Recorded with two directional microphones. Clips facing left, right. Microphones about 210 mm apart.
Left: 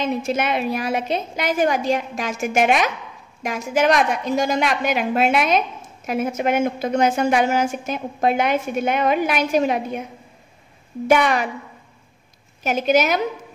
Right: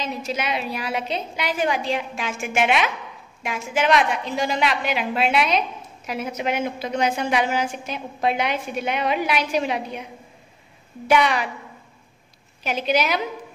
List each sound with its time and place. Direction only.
0.0 s a woman's voice: 55° left (ahead or behind)
11.1 s a woman's voice: 50° left (ahead or behind)
12.6 s a woman's voice: 45° left (ahead or behind)